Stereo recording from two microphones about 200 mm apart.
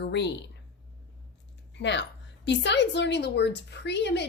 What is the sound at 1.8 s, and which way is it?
A woman's voice, 60° left (ahead or behind).